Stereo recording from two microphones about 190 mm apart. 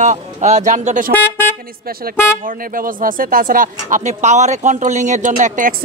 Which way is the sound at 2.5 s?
45° right (ahead or behind).